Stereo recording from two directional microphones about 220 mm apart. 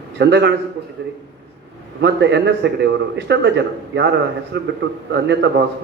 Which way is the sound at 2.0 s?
50° right (ahead or behind).